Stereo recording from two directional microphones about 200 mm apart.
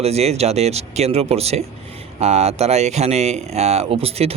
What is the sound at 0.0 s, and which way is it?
Speech, 30° right (ahead or behind).